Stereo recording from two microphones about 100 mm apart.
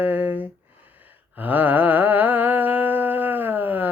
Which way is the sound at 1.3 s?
15° right (ahead or behind).